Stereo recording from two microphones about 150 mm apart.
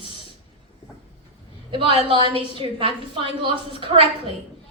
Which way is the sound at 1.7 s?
35° right (ahead or behind).